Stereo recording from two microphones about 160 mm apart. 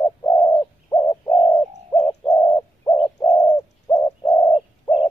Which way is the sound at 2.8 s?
20° left (ahead or behind).